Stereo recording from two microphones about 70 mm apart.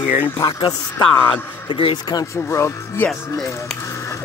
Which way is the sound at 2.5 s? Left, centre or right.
Left.